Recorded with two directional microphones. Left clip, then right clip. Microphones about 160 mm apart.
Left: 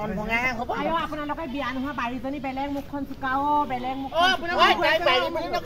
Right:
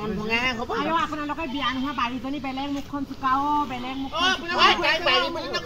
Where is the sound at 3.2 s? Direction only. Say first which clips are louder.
Right 1 dB; 20° left (ahead or behind).